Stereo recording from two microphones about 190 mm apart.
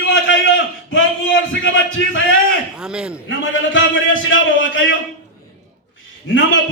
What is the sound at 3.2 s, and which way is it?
A man's voice, 85° left.